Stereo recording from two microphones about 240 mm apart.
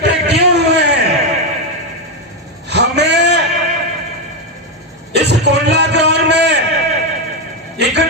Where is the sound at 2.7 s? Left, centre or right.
Right.